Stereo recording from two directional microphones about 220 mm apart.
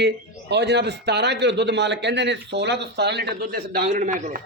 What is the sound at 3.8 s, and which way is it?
Speech, 35° right (ahead or behind).